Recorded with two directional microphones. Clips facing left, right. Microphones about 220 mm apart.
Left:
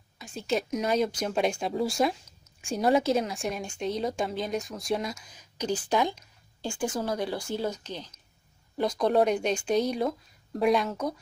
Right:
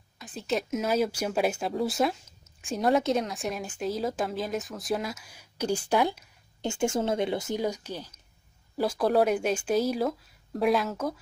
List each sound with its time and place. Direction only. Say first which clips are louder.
0.2 s speech: left 1 dB; centre (ahead or behind)
6.6 s speech: right 3 dB; 25° right (ahead or behind); by 11.1 s 5° right (ahead or behind)